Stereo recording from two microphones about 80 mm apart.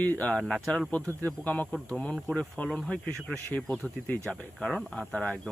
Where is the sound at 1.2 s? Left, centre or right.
Left.